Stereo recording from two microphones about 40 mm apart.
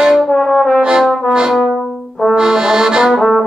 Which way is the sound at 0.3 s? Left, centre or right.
Centre.